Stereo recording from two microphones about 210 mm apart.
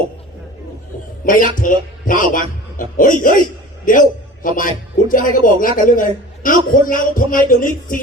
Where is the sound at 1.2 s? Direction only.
40° left (ahead or behind).